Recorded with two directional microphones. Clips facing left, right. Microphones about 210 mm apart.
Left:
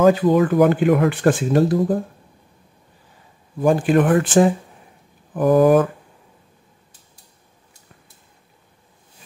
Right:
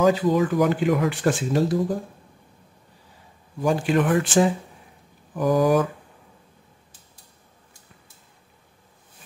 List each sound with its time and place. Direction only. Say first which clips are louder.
0.0 s speech: left 5 dB; 55° left (ahead or behind)
3.6 s speech: left 5 dB; 50° left (ahead or behind)